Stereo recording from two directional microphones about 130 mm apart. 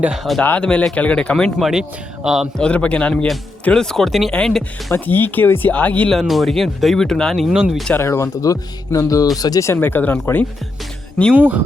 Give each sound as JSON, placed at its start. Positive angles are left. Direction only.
{"t": 0.0, "sound": "speech", "side_deg": -5}
{"t": 0.4, "sound": "speech", "side_deg": 10}
{"t": 1.5, "sound": "speech", "side_deg": -5}
{"t": 2.6, "sound": "speech", "side_deg": 10}
{"t": 4.9, "sound": "speech", "side_deg": 15}
{"t": 6.1, "sound": "speech", "side_deg": 0}
{"t": 7.9, "sound": "speech", "side_deg": 20}
{"t": 9.7, "sound": "speech", "side_deg": 15}
{"t": 11.3, "sound": "speech", "side_deg": -10}